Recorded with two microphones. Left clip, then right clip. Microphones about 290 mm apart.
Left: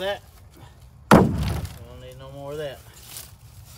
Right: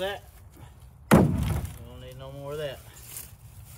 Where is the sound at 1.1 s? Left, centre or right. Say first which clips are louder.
Left 6 dB; left.